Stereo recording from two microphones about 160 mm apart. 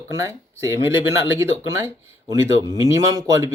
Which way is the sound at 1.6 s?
20° right (ahead or behind).